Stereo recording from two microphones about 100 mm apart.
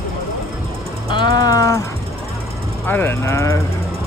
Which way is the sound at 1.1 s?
50° left (ahead or behind).